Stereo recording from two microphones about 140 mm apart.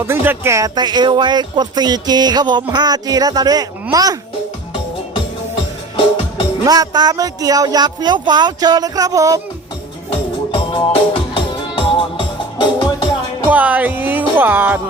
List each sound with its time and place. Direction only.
0.0 s speech: 15° right (ahead or behind)
6.7 s speech: 30° right (ahead or behind)
10.1 s music: 35° left (ahead or behind)
13.5 s speech: 10° right (ahead or behind)